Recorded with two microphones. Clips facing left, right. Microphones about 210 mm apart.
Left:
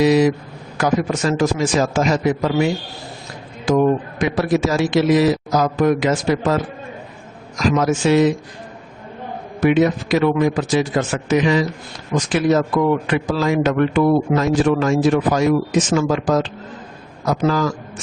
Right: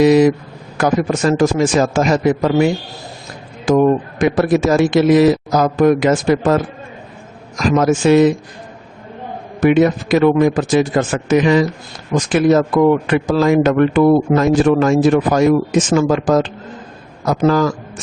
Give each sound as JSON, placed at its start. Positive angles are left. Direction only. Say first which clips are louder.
{"t": 0.0, "sound": "a man's voice", "louder": "right 4 dB", "side_deg": -50}
{"t": 3.7, "sound": "a man's voice", "louder": "right 3 dB", "side_deg": -50}
{"t": 7.8, "sound": "a man's voice", "louder": "right 5 dB", "side_deg": -50}
{"t": 9.6, "sound": "a man's voice", "louder": "right 3 dB", "side_deg": -50}